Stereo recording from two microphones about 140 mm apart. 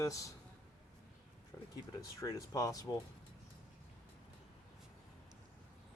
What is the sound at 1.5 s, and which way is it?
Speech, 15° left (ahead or behind).